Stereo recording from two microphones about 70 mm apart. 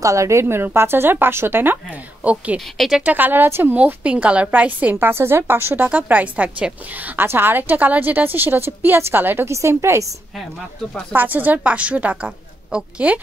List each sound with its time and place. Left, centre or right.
0.0 s a woman's voice: right
2.2 s a woman's voice: centre
3.7 s a woman's voice: centre
5.9 s a woman's voice: centre
7.2 s a woman's voice: right
9.5 s a woman's voice: right
11.1 s a woman's voice: right